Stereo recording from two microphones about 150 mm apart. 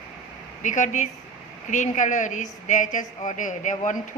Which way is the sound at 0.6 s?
55° left (ahead or behind).